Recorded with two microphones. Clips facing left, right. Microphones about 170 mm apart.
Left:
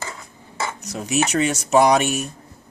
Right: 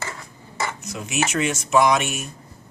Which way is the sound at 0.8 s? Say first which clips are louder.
Left 6 dB; 35° left (ahead or behind).